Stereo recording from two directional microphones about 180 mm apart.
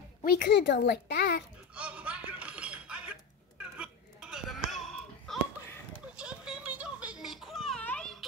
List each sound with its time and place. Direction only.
0.2 s a child's voice: 60° left (ahead or behind)
1.8 s chink: 5° right (ahead or behind)